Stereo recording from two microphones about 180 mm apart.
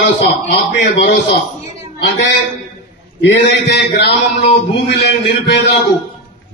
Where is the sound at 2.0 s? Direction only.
70° left (ahead or behind).